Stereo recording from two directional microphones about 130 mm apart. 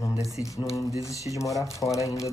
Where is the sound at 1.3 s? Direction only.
25° left (ahead or behind).